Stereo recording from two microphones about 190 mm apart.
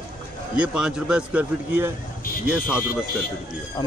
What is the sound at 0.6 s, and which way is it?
A man's voice, 5° right (ahead or behind).